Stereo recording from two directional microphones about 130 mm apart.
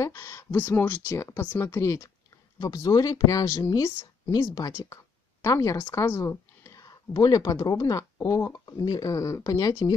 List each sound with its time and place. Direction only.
0.0 s speech: 20° left (ahead or behind)